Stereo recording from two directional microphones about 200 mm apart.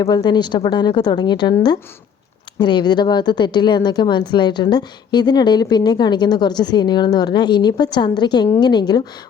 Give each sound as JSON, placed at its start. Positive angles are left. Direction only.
{"t": 0.0, "sound": "speech", "side_deg": 20}
{"t": 2.6, "sound": "speech", "side_deg": 20}